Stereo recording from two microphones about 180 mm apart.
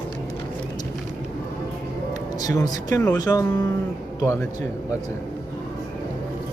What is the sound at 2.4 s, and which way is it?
Speech, 20° left (ahead or behind).